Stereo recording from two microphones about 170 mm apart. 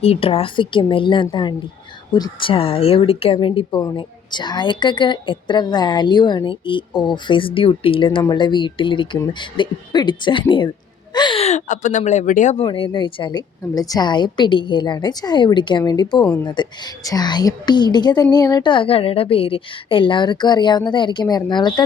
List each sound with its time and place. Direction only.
0.0 s speech: 35° left (ahead or behind)